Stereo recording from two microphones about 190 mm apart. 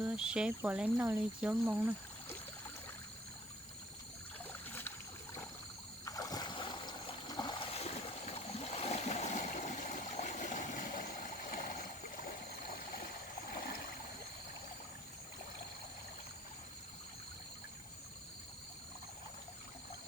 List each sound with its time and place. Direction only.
0.0 s speech: 5° right (ahead or behind)
6.1 s boat: 20° left (ahead or behind); by 12.3 s 45° left (ahead or behind)
13.5 s a sound: 50° left (ahead or behind)